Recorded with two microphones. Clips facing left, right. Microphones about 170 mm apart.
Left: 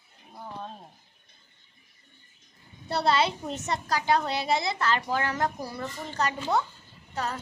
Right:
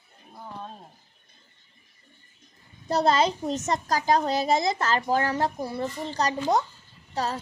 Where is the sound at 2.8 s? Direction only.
45° right (ahead or behind).